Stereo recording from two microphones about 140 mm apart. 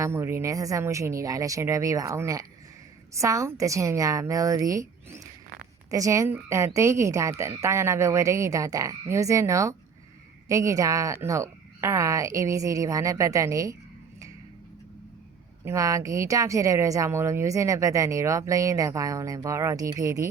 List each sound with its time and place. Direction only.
0.0 s speech: 20° right (ahead or behind)
15.6 s speech: 25° right (ahead or behind)